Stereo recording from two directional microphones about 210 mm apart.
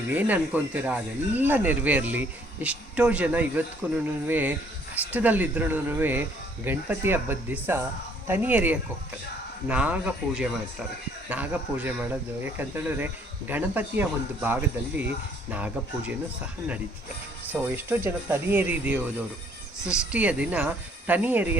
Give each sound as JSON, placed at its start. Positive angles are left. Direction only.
{"t": 0.1, "sound": "speech", "side_deg": -10}
{"t": 17.5, "sound": "speech", "side_deg": -10}